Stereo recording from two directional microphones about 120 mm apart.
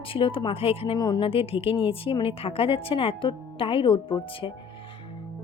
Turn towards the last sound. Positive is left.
turn(degrees=45)  # may be behind; listen again after turning